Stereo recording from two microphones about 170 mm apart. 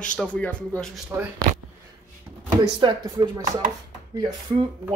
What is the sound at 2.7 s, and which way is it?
Speech, 25° right (ahead or behind).